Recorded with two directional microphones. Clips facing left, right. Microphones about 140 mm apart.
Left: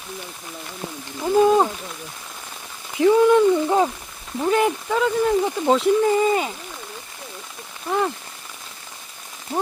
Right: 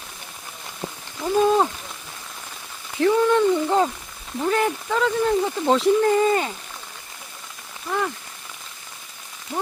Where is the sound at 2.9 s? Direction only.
15° left (ahead or behind).